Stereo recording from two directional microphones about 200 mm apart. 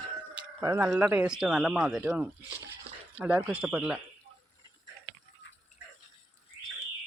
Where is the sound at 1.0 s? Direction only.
10° right (ahead or behind).